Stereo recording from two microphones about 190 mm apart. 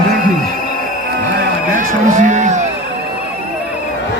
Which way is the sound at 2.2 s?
40° right (ahead or behind).